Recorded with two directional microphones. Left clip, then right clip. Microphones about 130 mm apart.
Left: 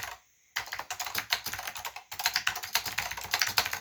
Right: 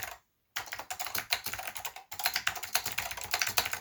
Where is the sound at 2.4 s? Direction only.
5° right (ahead or behind).